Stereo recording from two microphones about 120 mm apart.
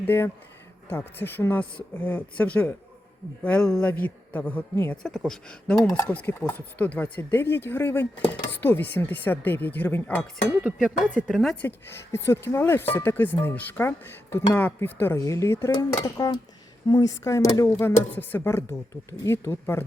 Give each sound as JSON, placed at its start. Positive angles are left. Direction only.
{"t": 0.0, "sound": "speech", "side_deg": 15}
{"t": 5.0, "sound": "speech", "side_deg": 5}
{"t": 11.3, "sound": "speech", "side_deg": 0}
{"t": 11.6, "sound": "speech", "side_deg": 20}
{"t": 15.7, "sound": "speech", "side_deg": 35}